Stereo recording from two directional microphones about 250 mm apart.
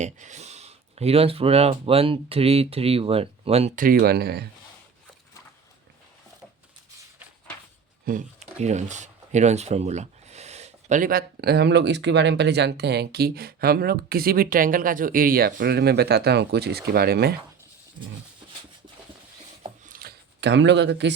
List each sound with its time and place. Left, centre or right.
0.0 s speech: right
8.0 s speech: right
19.8 s a sound: right